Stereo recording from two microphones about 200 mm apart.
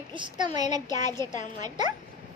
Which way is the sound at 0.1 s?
20° right (ahead or behind).